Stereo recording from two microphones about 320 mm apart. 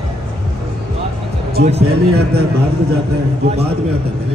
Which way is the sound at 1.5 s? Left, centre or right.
Right.